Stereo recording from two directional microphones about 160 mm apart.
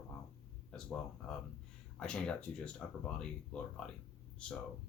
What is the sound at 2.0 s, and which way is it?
Speech, 5° left (ahead or behind).